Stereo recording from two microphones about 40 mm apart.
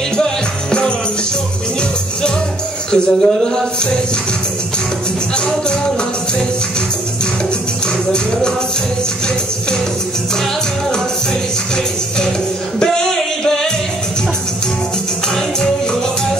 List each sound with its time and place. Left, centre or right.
0.2 s music: left
2.9 s a sound: centre
11.7 s music: centre